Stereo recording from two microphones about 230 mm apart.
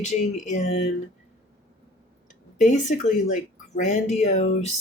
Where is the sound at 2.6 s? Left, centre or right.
Left.